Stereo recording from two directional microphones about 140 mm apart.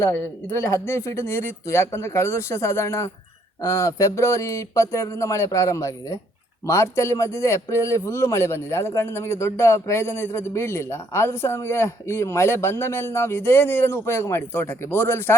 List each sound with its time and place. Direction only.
0.0 s a man's voice: 20° left (ahead or behind)